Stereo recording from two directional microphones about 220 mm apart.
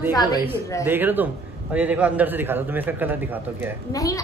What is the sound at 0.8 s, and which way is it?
A man's voice, 10° right (ahead or behind).